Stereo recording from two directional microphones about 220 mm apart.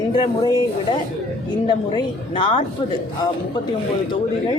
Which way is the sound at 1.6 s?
20° left (ahead or behind).